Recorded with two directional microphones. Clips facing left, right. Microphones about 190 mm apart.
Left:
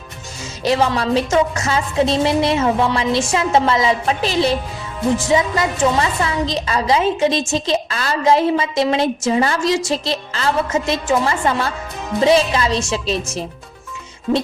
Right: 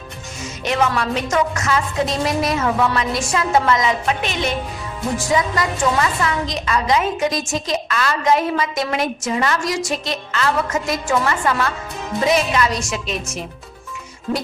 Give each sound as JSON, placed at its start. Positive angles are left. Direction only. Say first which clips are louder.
{"t": 0.6, "sound": "a woman's voice", "louder": "left 3 dB", "side_deg": 30}